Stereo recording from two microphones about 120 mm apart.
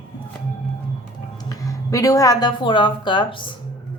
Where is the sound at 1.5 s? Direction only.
30° left (ahead or behind).